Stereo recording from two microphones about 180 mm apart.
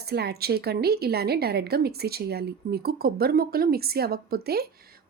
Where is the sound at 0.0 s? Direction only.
65° right (ahead or behind).